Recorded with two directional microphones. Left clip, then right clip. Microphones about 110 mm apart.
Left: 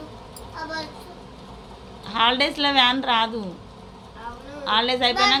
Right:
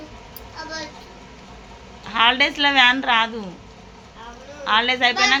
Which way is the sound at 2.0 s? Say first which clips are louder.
Right 3 dB; centre (ahead or behind).